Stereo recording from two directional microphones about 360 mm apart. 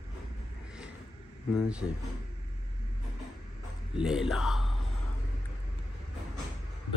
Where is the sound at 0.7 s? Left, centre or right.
Centre.